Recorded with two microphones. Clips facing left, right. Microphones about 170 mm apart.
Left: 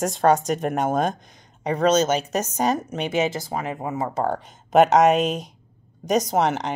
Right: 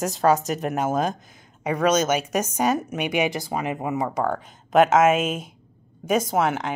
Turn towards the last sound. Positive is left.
turn(degrees=0)  # may be behind; listen again after turning